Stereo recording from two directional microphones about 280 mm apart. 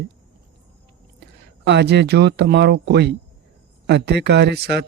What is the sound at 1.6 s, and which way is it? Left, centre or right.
Speech, right.